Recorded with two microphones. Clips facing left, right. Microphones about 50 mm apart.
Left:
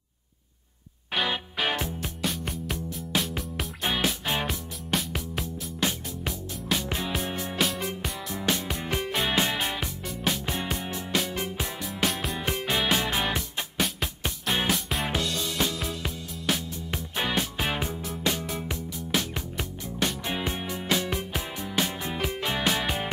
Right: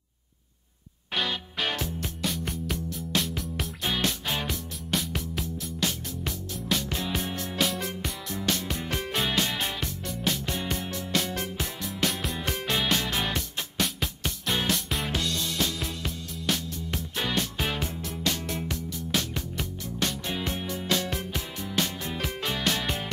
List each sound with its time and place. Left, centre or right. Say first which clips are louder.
1.1 s music: left 2 dB; centre
2.2 s music: even; centre
5.8 s music: left 2 dB; centre